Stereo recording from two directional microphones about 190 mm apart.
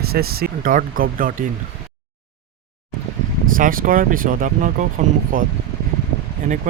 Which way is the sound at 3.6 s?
45° right (ahead or behind).